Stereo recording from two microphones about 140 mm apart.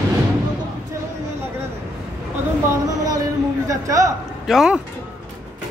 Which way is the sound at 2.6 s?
25° right (ahead or behind).